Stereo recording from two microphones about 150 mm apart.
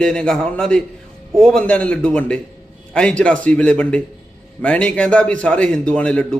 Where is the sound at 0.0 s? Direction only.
5° left (ahead or behind).